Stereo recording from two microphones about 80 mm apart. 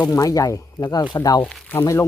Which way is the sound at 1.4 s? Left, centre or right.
Centre.